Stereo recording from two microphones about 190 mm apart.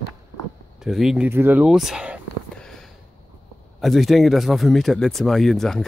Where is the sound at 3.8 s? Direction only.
Centre (ahead or behind).